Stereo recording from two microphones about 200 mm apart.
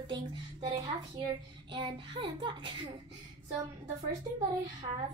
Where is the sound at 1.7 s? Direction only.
25° right (ahead or behind).